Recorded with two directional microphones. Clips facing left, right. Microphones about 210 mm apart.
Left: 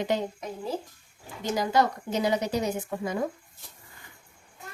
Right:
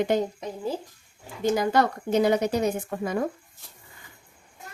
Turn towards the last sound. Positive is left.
turn(degrees=-55)  # may be behind; listen again after turning